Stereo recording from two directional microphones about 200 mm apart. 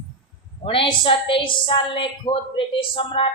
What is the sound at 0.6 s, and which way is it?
A woman's voice, 25° left (ahead or behind).